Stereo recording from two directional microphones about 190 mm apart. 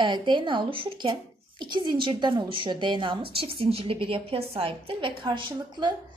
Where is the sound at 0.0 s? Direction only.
25° right (ahead or behind).